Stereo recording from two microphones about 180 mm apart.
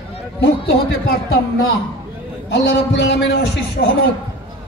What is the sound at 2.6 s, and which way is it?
Speech, 75° left (ahead or behind).